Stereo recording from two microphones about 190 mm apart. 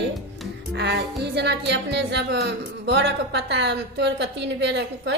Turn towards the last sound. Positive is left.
turn(degrees=-65)  # may be behind; listen again after turning